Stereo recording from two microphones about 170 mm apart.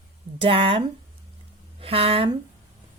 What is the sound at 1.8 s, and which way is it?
Speech, 35° right (ahead or behind).